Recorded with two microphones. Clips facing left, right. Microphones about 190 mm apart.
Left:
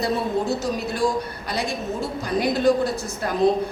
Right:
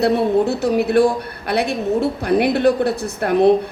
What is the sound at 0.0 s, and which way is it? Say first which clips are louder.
A woman's voice: right 8 dB; 60° right (ahead or behind).